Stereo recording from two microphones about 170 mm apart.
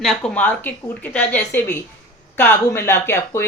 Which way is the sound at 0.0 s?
10° left (ahead or behind).